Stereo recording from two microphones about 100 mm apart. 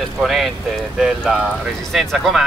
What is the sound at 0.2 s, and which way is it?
Speech, 5° right (ahead or behind).